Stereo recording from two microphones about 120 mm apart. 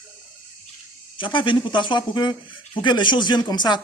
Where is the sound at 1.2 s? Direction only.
45° left (ahead or behind).